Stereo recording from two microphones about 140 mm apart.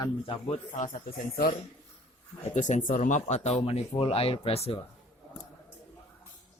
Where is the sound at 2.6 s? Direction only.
60° left (ahead or behind).